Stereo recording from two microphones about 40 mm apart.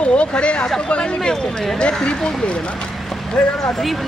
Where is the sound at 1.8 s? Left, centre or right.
Left.